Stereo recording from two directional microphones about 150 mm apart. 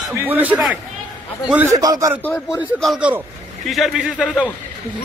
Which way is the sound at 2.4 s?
Centre (ahead or behind).